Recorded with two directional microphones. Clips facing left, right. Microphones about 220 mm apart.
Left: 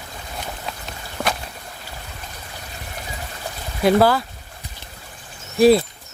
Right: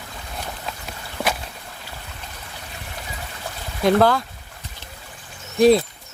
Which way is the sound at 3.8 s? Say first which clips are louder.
Left 1 dB; 5° left (ahead or behind).